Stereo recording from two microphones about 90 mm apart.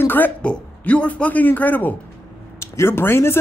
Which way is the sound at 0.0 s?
20° left (ahead or behind).